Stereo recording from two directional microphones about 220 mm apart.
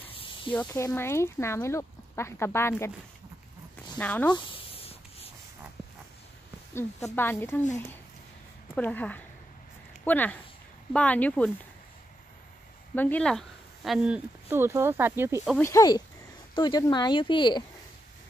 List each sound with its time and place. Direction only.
0.5 s speech: 10° left (ahead or behind)
4.0 s speech: 5° left (ahead or behind)
4.3 s writing: 25° left (ahead or behind)
6.7 s a woman's voice: 10° left (ahead or behind)
12.9 s speech: 10° left (ahead or behind); by 15.5 s 10° right (ahead or behind)
15.5 s speech: 15° left (ahead or behind)